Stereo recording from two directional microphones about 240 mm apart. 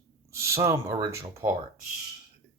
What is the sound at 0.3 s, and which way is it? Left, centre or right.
Speech, centre.